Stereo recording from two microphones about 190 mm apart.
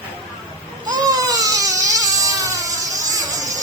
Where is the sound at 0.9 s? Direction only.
20° right (ahead or behind).